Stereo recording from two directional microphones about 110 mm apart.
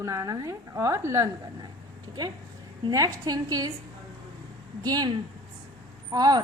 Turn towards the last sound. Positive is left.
turn(degrees=-35)  # may be behind; listen again after turning